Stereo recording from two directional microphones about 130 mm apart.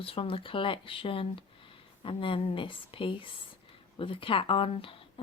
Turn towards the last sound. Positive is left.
turn(degrees=45)  # may be behind; listen again after turning